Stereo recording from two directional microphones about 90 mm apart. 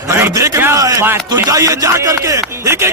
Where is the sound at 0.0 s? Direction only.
35° right (ahead or behind).